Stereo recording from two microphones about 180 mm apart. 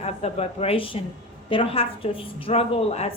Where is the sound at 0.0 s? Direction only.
35° left (ahead or behind).